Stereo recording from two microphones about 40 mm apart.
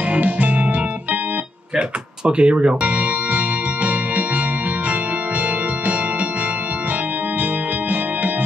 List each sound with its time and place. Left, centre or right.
0.1 s music: right
1.8 s music: right